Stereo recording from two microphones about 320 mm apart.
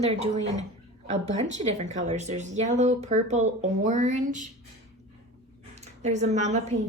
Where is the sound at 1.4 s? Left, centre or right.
Right.